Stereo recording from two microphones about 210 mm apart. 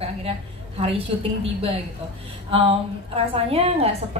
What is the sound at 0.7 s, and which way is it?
A woman's voice, 30° right (ahead or behind).